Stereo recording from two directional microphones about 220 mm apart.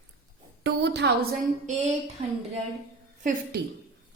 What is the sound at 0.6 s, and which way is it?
Speech, 50° right (ahead or behind).